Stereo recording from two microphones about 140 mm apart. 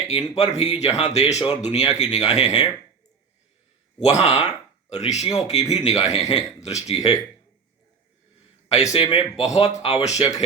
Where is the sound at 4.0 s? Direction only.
50° left (ahead or behind).